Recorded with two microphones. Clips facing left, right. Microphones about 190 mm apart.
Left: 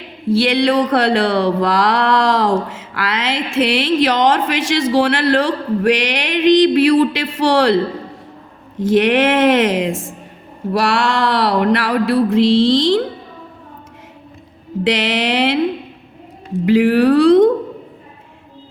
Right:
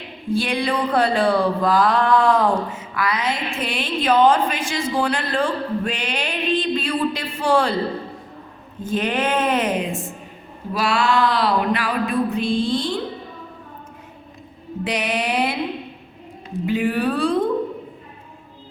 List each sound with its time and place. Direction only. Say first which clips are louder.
0.3 s speech: left 7 dB; 85° left
8.8 s a woman's voice: left 9 dB; 90° left
10.7 s speech: left 4 dB; 75° left (ahead or behind)
14.8 s a woman's voice: left 6 dB; 90° left
16.6 s speech: left 9 dB; 90° left